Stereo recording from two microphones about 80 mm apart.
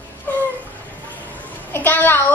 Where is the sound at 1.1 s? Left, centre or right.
Left.